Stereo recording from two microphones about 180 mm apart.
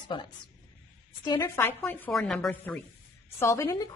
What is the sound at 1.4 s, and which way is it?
A woman's voice, 10° left (ahead or behind).